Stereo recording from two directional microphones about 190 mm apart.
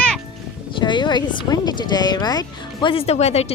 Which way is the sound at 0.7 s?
25° left (ahead or behind).